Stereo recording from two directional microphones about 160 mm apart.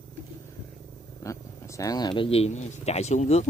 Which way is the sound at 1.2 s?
20° left (ahead or behind).